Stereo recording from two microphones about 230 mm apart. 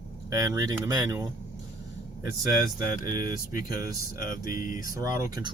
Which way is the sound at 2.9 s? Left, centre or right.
Left.